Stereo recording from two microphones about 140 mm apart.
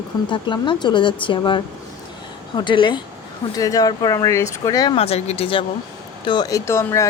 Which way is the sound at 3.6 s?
25° left (ahead or behind).